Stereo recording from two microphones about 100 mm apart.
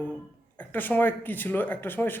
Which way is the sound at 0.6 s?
20° left (ahead or behind).